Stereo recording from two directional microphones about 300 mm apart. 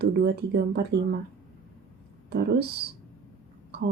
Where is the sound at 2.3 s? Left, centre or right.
Right.